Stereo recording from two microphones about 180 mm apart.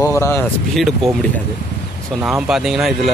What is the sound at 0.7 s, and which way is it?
Speech, centre (ahead or behind).